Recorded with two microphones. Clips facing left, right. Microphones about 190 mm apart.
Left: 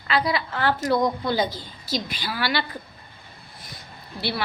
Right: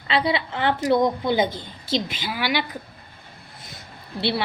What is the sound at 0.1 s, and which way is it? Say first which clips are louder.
A woman's voice: right 1 dB; 25° right (ahead or behind).